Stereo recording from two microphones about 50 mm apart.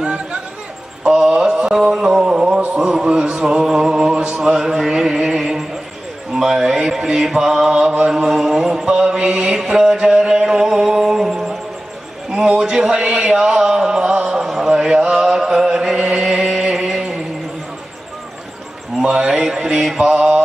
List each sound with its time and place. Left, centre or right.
0.0 s a sound: right
1.0 s mantra: centre
2.7 s music: centre
6.3 s mantra: centre
8.1 s a sound: centre
14.7 s chant: centre
18.9 s mantra: centre